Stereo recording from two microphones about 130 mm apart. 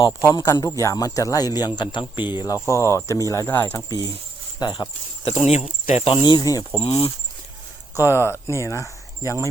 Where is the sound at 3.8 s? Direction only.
30° left (ahead or behind).